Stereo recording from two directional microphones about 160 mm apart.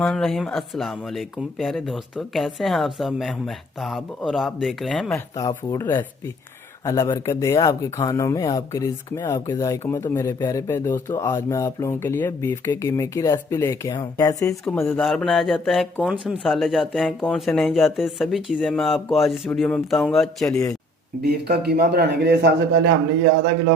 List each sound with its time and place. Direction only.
0.0 s speech: 5° left (ahead or behind)
5.1 s speech: 20° left (ahead or behind)
14.6 s speech: 10° left (ahead or behind)
15.0 s speech: centre (ahead or behind)
21.2 s a man's voice: 75° right (ahead or behind)